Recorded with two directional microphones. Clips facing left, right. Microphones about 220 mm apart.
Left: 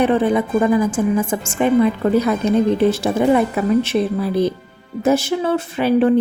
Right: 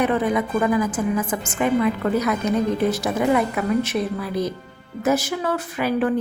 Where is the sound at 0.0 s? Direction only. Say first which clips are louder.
Left 5 dB; 30° left (ahead or behind).